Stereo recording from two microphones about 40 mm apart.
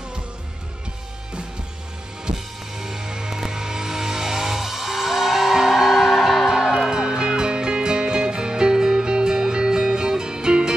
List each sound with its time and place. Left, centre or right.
2.3 s music: centre